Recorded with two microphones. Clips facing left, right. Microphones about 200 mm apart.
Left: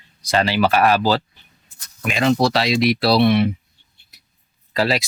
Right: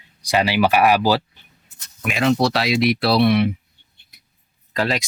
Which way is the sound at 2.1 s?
Centre (ahead or behind).